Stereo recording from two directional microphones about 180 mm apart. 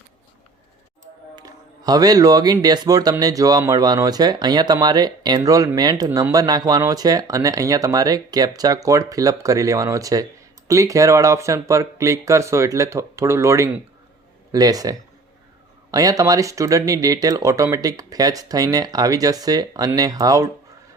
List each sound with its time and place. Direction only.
1.4 s speech: 20° right (ahead or behind)